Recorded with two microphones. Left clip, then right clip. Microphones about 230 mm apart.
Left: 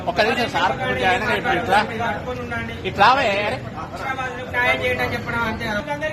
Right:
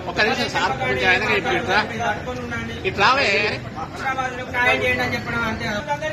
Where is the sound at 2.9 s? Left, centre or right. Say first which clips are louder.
Left 2 dB; left.